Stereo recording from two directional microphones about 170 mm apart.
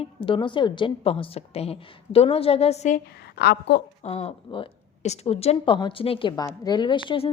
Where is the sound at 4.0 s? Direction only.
40° left (ahead or behind).